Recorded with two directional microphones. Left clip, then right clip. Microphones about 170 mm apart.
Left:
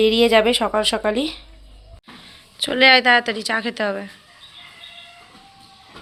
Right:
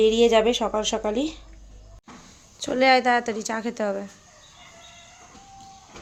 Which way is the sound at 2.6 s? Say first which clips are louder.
Left 5 dB; 10° right (ahead or behind).